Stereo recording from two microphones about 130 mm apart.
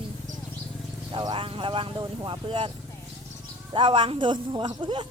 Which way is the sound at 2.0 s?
30° right (ahead or behind).